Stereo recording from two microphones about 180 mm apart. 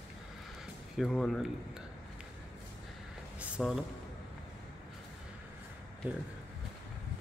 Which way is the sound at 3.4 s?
Centre (ahead or behind).